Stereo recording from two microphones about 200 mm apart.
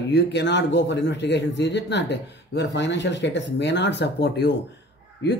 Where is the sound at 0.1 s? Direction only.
60° left (ahead or behind).